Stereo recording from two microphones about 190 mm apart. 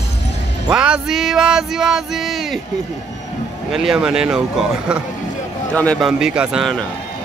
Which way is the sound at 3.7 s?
Centre (ahead or behind).